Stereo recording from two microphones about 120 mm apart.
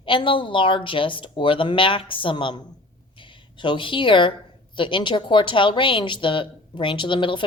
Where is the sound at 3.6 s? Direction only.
45° left (ahead or behind).